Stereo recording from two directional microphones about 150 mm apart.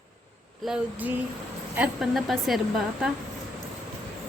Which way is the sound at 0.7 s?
10° right (ahead or behind).